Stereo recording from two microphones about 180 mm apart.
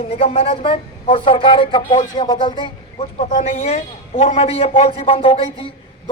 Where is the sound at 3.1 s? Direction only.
40° left (ahead or behind).